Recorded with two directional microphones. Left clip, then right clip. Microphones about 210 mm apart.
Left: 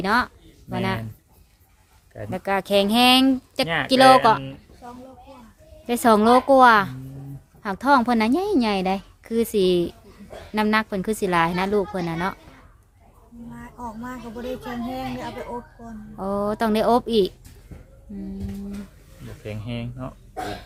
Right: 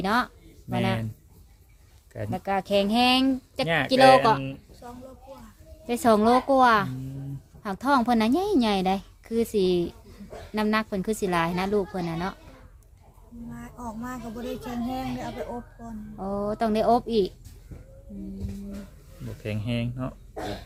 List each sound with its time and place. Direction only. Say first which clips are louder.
0.0 s a woman's voice: left 4 dB; 10° left (ahead or behind)
2.3 s a woman's voice: left 4 dB; 15° left (ahead or behind)
5.8 s a woman's voice: left 4 dB; 15° left (ahead or behind)
13.5 s speech: left 3 dB; 10° right (ahead or behind)
16.1 s speech: left 4 dB; 20° left (ahead or behind)
19.4 s speech: right 2 dB; 30° right (ahead or behind)